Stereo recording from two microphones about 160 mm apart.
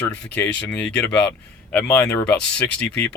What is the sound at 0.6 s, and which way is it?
Speech, 10° left (ahead or behind).